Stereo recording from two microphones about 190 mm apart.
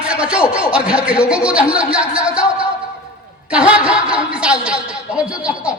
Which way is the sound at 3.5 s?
5° right (ahead or behind).